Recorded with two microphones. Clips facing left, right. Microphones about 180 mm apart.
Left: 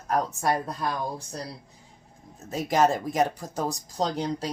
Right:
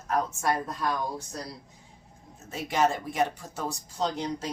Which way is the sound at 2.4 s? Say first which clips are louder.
Left 4 dB; 40° left (ahead or behind).